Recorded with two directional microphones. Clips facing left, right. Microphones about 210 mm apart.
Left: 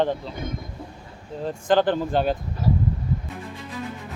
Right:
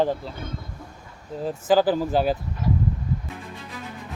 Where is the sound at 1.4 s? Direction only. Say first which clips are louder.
Right 1 dB; 5° right (ahead or behind).